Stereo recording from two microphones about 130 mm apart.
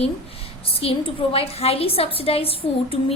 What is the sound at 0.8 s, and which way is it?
A woman's voice, 45° left (ahead or behind).